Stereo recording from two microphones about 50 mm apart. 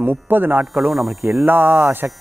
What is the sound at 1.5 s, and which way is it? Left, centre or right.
Speech, right.